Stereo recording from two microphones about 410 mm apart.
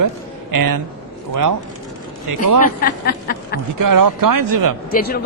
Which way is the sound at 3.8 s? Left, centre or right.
Right.